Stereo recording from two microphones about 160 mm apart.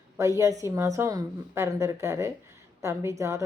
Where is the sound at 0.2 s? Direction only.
20° right (ahead or behind).